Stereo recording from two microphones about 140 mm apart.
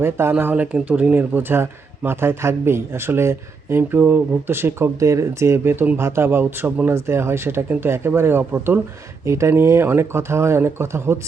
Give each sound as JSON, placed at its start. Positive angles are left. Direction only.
{"t": 0.0, "sound": "speech", "side_deg": -15}